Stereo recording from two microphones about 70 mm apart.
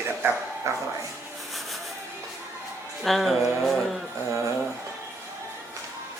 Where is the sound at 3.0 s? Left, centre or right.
Centre.